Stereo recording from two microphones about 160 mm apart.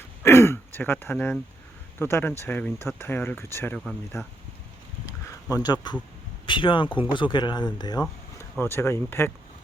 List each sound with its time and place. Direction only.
0.2 s throat clearing: 15° left (ahead or behind)
2.0 s speech: 15° left (ahead or behind)
5.0 s a sound: 20° left (ahead or behind)
6.4 s speech: 30° left (ahead or behind)
8.4 s speech: 15° left (ahead or behind)